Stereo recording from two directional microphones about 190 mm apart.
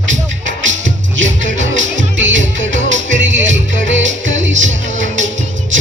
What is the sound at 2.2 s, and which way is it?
Music, 75° right (ahead or behind).